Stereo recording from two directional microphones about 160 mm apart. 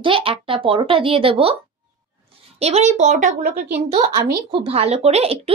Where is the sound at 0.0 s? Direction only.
35° right (ahead or behind).